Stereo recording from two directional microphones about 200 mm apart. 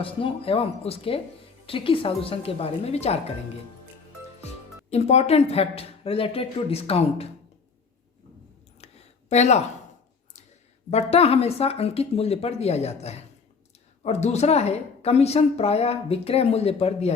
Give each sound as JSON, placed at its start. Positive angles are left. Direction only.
{"t": 0.0, "sound": "a woman's voice", "side_deg": 25}
{"t": 4.9, "sound": "a woman's voice", "side_deg": 35}
{"t": 8.8, "sound": "a sound", "side_deg": 35}
{"t": 10.9, "sound": "a woman's voice", "side_deg": 30}